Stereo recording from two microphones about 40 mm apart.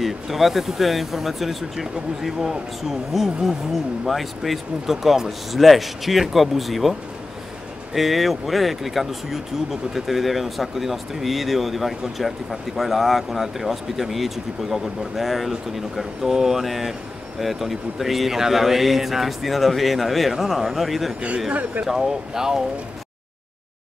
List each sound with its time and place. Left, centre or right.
0.0 s speech: centre